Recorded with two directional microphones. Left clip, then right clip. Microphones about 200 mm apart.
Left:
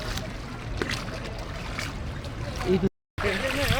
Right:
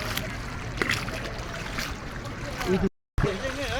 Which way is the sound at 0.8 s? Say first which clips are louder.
Right 4 dB; 35° right (ahead or behind).